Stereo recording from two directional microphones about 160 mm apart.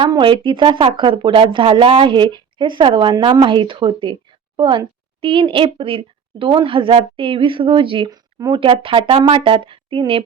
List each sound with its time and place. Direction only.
0.0 s speech: 30° right (ahead or behind)